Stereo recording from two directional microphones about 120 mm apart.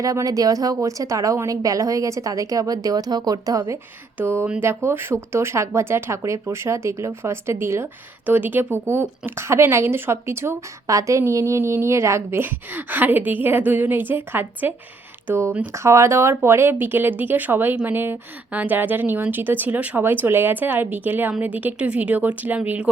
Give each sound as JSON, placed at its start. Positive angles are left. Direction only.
{"t": 0.0, "sound": "a woman's voice", "side_deg": -30}